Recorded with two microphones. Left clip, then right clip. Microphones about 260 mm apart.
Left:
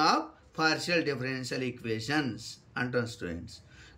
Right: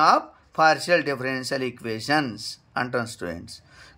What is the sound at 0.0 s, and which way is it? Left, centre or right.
Speech, centre.